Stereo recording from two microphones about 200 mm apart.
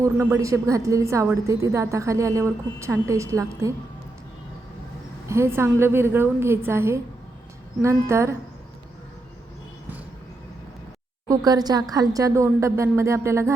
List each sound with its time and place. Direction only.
0.0 s a woman's voice: 15° right (ahead or behind)
5.3 s a woman's voice: 15° right (ahead or behind)
11.3 s a woman's voice: 20° right (ahead or behind)